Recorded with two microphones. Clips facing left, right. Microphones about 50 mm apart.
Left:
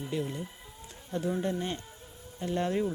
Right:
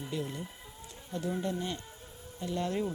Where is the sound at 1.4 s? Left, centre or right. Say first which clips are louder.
Left 2 dB; left.